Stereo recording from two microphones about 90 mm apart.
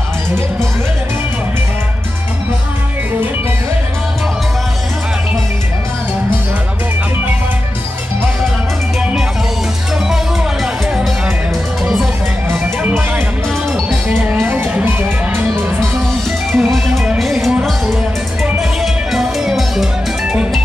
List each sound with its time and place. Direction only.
10.0 s music: 5° right (ahead or behind)
12.4 s music: 25° right (ahead or behind)
16.5 s music: centre (ahead or behind)
18.6 s music: centre (ahead or behind)